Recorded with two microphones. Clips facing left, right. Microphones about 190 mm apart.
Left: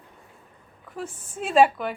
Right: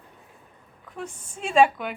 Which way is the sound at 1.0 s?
5° left (ahead or behind).